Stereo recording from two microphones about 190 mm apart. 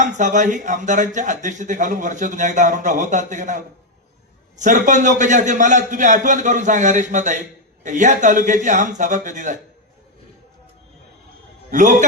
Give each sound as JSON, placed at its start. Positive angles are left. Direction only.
{"t": 0.0, "sound": "speech", "side_deg": -40}
{"t": 11.7, "sound": "speech", "side_deg": -40}